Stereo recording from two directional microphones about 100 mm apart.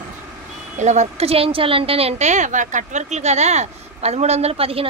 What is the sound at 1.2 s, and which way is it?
Speech, 75° right (ahead or behind).